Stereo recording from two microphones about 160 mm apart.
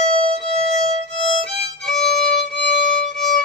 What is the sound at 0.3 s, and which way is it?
Music, 45° right (ahead or behind).